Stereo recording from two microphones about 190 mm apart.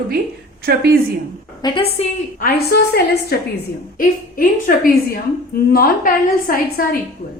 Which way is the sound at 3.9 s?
45° left (ahead or behind).